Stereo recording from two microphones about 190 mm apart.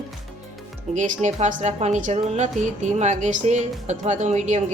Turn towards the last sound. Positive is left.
turn(degrees=-40)  # may be behind; listen again after turning